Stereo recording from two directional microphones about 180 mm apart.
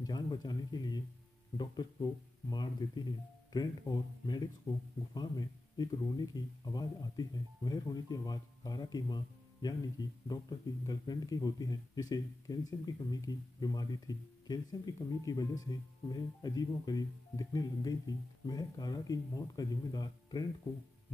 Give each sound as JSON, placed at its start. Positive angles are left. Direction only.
{"t": 0.0, "sound": "speech", "side_deg": 25}